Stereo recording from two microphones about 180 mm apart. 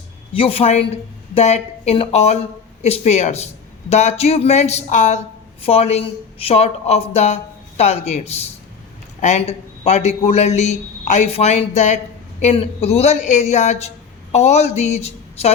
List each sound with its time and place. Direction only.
0.3 s a man's voice: 30° left (ahead or behind)